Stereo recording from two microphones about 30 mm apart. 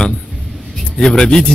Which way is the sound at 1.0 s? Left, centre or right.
Left.